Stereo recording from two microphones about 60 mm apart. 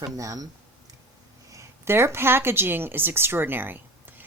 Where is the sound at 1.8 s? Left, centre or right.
Right.